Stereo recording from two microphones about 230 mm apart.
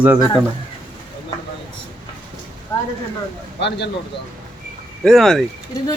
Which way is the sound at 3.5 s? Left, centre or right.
Left.